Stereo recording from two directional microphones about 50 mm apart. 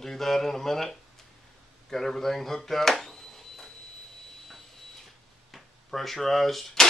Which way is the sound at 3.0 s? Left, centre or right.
Centre.